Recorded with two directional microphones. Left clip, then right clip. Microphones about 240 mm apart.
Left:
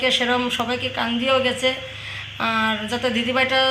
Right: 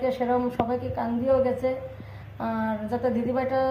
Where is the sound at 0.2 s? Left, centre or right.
Left.